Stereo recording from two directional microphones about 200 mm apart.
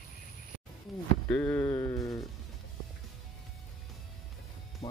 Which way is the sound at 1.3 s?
10° left (ahead or behind).